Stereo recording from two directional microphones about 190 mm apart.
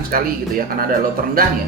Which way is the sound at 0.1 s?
50° right (ahead or behind).